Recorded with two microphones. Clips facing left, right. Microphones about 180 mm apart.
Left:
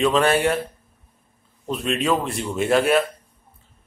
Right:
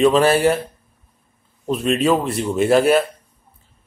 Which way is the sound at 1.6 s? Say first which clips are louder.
Right 5 dB; centre (ahead or behind).